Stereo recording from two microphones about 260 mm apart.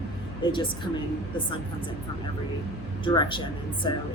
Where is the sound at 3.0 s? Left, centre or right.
Centre.